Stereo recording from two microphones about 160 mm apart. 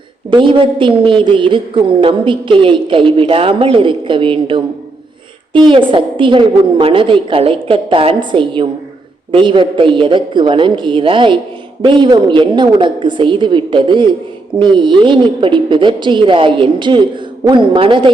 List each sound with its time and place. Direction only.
0.3 s a woman's voice: 30° right (ahead or behind)